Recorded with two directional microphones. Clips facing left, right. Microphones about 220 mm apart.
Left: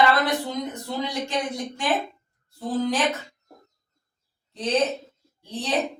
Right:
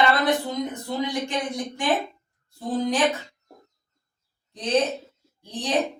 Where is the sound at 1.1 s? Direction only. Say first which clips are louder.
Even; 15° right (ahead or behind).